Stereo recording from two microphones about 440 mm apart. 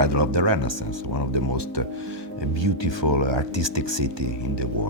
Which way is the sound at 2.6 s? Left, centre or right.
Right.